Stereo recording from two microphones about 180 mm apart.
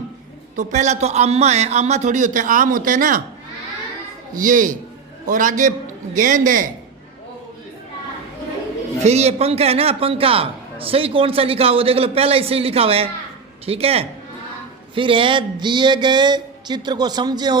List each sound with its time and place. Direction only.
0.5 s a man's voice: 45° right (ahead or behind)
4.4 s a man's voice: 45° right (ahead or behind)
9.0 s a man's voice: 35° right (ahead or behind)
14.9 s a sound: 30° right (ahead or behind)